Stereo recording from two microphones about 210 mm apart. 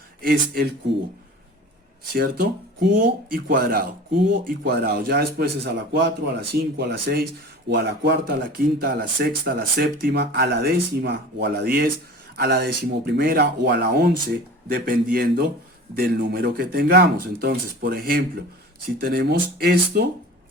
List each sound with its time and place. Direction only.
0.2 s speech: 45° right (ahead or behind)
2.1 s speech: 50° right (ahead or behind)